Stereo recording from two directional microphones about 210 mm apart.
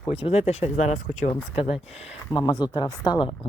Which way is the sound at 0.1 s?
30° left (ahead or behind).